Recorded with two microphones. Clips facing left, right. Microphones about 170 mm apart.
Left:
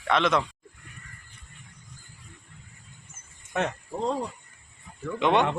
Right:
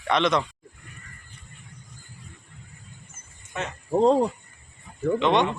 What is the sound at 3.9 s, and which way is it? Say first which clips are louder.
Speech: right 10 dB; 65° right (ahead or behind).